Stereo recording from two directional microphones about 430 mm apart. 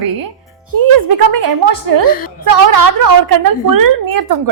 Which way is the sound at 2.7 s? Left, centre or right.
Right.